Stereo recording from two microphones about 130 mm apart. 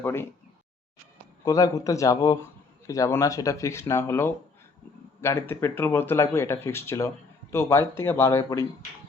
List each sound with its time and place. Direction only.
0.0 s speech: 20° left (ahead or behind)
1.5 s speech: 25° left (ahead or behind)